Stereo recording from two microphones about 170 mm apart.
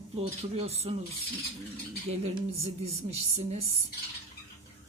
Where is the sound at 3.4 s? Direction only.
35° right (ahead or behind).